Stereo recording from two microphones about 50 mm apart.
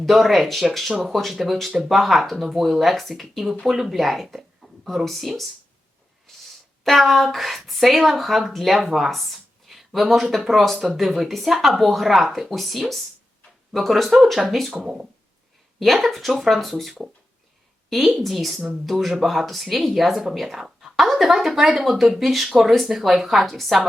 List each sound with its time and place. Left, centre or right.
0.0 s speech: centre
6.3 s a sound: centre
6.8 s speech: centre
14.7 s speech: centre
15.8 s speech: centre